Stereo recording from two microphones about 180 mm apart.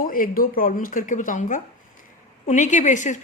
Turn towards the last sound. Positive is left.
turn(degrees=40)  # may be behind; listen again after turning